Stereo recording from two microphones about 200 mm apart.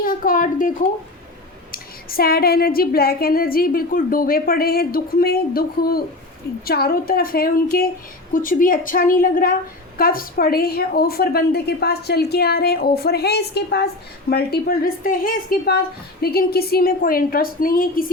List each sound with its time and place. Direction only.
0.0 s a woman's voice: 45° left (ahead or behind)